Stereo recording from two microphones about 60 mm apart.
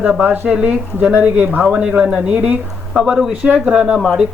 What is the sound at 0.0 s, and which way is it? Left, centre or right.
Speech, right.